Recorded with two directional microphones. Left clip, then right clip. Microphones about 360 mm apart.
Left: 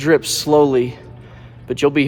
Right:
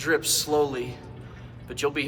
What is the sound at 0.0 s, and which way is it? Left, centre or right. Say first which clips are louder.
Speech: left 9 dB; left.